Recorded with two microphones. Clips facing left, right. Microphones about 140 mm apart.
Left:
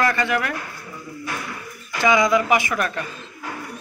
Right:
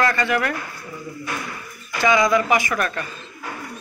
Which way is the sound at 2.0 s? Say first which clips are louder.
Even; 20° left (ahead or behind).